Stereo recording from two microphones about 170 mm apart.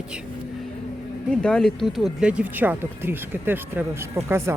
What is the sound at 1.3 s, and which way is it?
Speech, 5° left (ahead or behind).